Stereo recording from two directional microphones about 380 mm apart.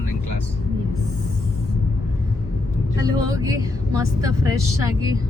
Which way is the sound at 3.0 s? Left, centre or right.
Centre.